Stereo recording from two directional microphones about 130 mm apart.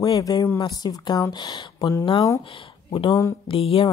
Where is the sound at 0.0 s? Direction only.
30° left (ahead or behind).